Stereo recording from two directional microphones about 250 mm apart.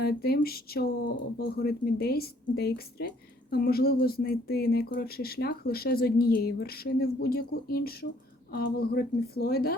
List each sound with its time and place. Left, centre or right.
0.0 s speech: left